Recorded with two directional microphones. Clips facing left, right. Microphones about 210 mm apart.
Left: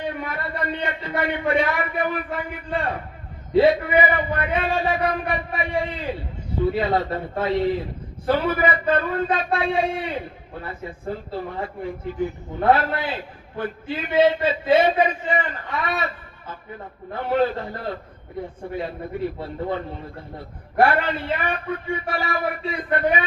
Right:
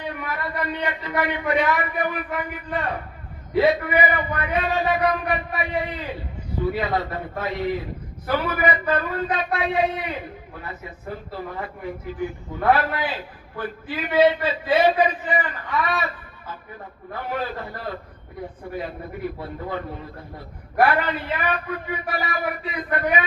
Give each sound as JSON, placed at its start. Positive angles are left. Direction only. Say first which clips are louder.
{"t": 0.2, "sound": "a man's voice", "louder": "even", "side_deg": 30}
{"t": 17.1, "sound": "a man's voice", "louder": "left 7 dB", "side_deg": 25}